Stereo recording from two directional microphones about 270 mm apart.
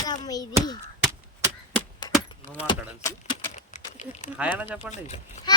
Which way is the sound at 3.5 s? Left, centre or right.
Left.